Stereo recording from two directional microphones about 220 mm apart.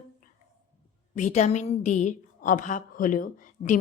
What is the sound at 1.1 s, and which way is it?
A woman's voice, 35° left (ahead or behind).